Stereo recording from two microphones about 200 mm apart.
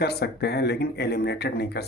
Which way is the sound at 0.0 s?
50° left (ahead or behind).